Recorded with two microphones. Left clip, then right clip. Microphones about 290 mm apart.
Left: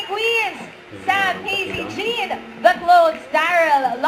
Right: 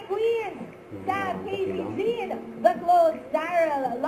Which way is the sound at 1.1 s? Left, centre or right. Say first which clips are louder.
Left 9 dB; centre.